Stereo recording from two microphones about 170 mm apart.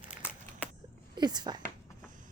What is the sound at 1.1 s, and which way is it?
Speech, 25° right (ahead or behind).